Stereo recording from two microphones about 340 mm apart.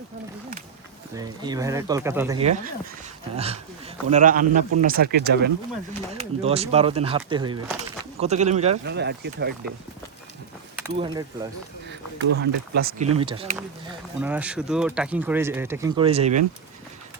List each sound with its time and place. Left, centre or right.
1.1 s speech: centre; by 5.5 s right
6.1 s speech: centre
8.8 s speech: right
10.8 s speech: centre
11.9 s speech: right
14.2 s speech: centre